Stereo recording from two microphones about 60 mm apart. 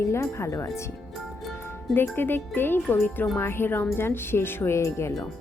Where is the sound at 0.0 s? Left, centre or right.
Left.